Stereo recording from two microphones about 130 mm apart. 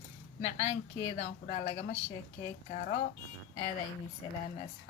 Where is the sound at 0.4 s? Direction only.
60° left (ahead or behind).